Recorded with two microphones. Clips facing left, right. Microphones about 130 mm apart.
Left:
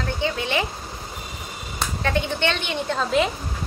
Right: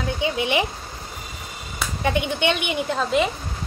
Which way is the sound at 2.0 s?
15° right (ahead or behind).